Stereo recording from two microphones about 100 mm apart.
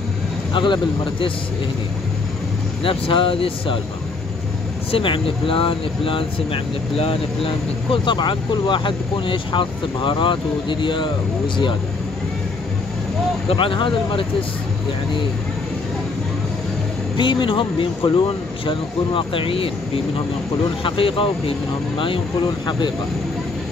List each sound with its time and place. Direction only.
0.5 s speech: 50° left (ahead or behind)
2.8 s speech: 60° left (ahead or behind)
4.9 s speech: 60° left (ahead or behind)
13.5 s speech: 60° left (ahead or behind)
17.2 s speech: 55° left (ahead or behind)
22.7 s speech: 50° left (ahead or behind)